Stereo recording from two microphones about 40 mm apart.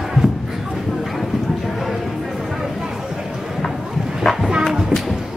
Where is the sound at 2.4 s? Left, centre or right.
Centre.